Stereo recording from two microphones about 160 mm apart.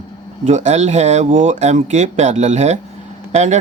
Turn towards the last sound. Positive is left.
turn(degrees=-45)  # may be behind; listen again after turning